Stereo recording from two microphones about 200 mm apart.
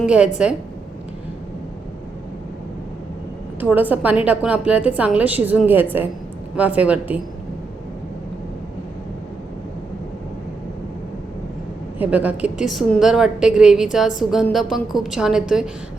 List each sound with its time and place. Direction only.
0.0 s a woman's voice: 5° right (ahead or behind)
3.6 s a woman's voice: 10° right (ahead or behind)
11.9 s a woman's voice: 5° right (ahead or behind)